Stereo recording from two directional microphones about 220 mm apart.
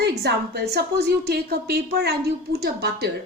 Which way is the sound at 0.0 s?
50° right (ahead or behind).